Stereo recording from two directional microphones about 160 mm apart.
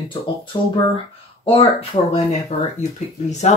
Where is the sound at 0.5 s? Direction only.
35° left (ahead or behind).